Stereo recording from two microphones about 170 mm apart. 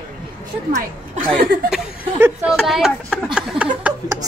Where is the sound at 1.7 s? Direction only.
15° right (ahead or behind).